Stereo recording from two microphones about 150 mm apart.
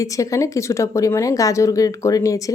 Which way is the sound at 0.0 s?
20° left (ahead or behind).